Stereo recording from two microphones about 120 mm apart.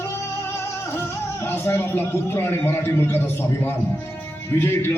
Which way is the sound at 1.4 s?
20° left (ahead or behind).